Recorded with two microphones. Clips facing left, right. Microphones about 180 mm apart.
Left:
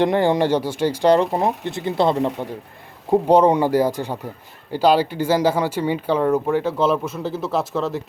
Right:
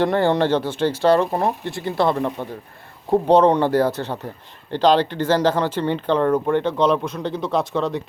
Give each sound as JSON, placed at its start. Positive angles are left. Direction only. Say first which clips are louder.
{"t": 0.0, "sound": "speech", "louder": "left 1 dB", "side_deg": 15}